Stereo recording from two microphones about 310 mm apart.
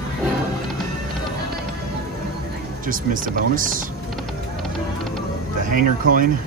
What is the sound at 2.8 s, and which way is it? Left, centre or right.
Speech, right.